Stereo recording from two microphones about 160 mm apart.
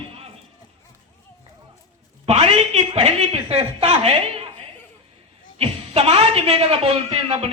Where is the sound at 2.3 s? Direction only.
40° right (ahead or behind).